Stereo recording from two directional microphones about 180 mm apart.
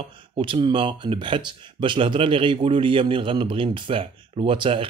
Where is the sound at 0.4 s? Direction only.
30° right (ahead or behind).